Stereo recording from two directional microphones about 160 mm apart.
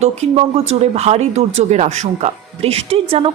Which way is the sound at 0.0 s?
40° right (ahead or behind).